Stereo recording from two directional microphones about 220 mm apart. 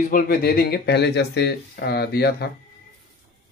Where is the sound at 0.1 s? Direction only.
45° left (ahead or behind).